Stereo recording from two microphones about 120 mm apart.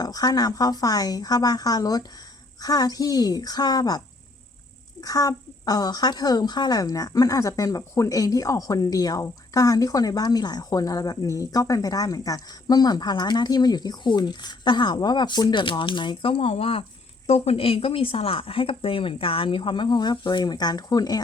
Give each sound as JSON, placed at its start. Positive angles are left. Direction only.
{"t": 0.0, "sound": "a woman's voice", "side_deg": 30}